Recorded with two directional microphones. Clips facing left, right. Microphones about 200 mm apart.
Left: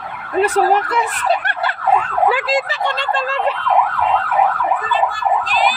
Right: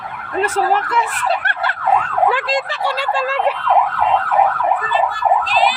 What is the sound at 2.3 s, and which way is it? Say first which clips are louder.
Speech: left 1 dB; 5° left (ahead or behind).